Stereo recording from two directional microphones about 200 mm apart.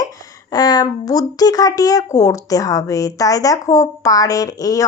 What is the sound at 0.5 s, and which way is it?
Speech, 20° left (ahead or behind).